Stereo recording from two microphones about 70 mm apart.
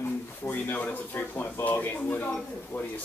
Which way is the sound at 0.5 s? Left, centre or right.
Left.